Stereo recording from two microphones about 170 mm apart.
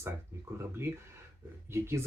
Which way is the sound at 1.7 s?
15° right (ahead or behind).